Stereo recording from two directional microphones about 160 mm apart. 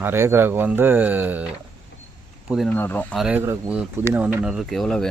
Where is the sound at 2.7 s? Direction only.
10° left (ahead or behind).